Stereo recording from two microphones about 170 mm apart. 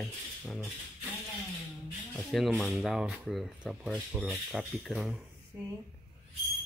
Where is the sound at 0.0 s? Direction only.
Centre (ahead or behind).